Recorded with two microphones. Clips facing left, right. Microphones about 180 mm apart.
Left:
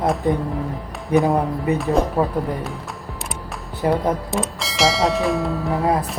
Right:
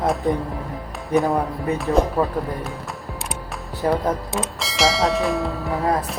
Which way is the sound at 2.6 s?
Centre (ahead or behind).